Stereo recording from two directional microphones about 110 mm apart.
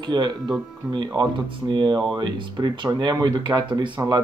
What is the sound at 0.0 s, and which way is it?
Speech, 40° right (ahead or behind).